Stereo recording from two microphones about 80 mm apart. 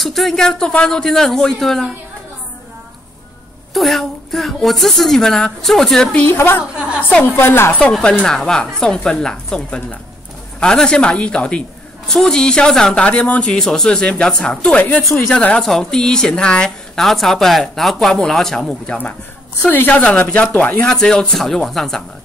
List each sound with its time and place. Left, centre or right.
0.0 s a woman's voice: centre
3.7 s a woman's voice: centre
6.3 s a woman's voice: left
7.4 s speech: left
8.0 s a woman's voice: centre